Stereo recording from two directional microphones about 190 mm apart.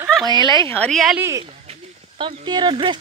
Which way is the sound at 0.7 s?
5° left (ahead or behind).